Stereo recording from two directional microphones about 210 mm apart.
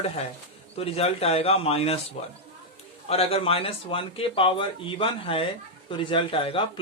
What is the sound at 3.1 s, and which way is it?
A man's voice, 30° left (ahead or behind).